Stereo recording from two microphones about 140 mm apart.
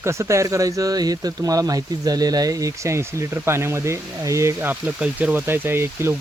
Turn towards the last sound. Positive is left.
turn(degrees=-15)  # may be behind; listen again after turning